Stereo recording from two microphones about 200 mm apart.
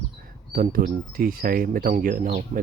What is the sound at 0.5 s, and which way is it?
Speech, 45° right (ahead or behind).